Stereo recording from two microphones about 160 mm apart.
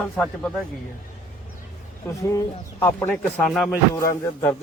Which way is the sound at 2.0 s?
20° left (ahead or behind).